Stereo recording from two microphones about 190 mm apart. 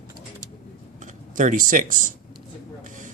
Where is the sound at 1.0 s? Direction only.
40° right (ahead or behind).